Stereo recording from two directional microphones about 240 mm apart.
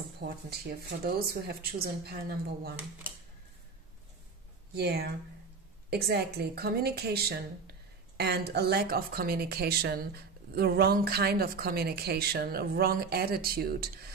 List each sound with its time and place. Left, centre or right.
0.2 s speech: right
4.7 s speech: right